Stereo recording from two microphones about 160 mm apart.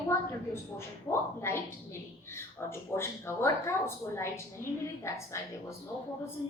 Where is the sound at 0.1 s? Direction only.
15° left (ahead or behind).